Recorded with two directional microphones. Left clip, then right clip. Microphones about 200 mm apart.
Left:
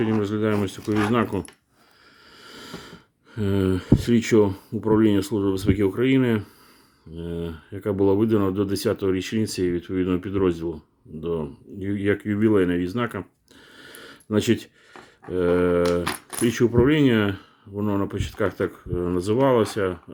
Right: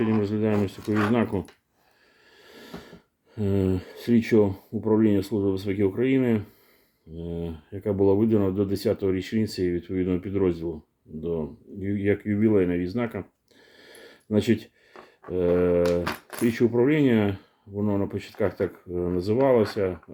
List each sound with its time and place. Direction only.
0.0 s speech: 15° left (ahead or behind)
13.7 s a sound: 20° left (ahead or behind)
15.3 s speech: 20° left (ahead or behind)